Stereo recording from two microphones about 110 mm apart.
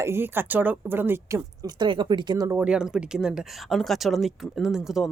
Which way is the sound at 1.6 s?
45° right (ahead or behind).